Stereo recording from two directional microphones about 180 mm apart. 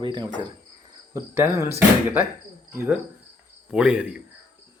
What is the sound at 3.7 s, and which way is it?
Rub, 5° right (ahead or behind).